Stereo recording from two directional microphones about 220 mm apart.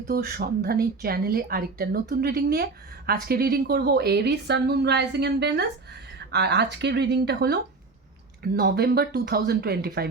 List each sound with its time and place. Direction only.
0.1 s speech: 45° right (ahead or behind)